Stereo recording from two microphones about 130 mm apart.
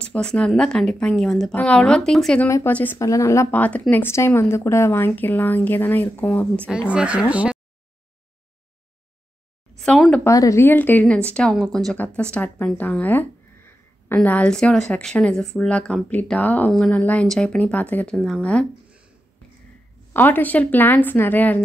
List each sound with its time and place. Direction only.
0.0 s a woman's voice: 5° left (ahead or behind)
2.4 s a woman's voice: 15° left (ahead or behind)
6.7 s speech: 5° right (ahead or behind)
9.8 s speech: centre (ahead or behind)
10.2 s a woman's voice: 25° left (ahead or behind)
18.1 s a woman's voice: centre (ahead or behind)
20.1 s a woman's voice: 15° left (ahead or behind)